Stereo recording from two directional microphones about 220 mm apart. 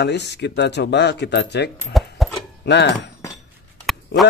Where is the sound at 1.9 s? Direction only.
Centre (ahead or behind).